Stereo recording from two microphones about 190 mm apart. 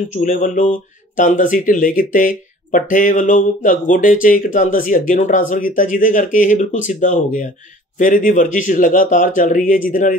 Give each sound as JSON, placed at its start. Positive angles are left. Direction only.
{"t": 0.1, "sound": "speech", "side_deg": 45}